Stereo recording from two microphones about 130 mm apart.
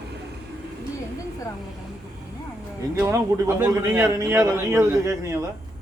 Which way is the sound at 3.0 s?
25° right (ahead or behind).